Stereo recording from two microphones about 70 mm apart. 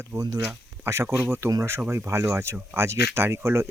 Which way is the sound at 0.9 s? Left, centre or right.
Right.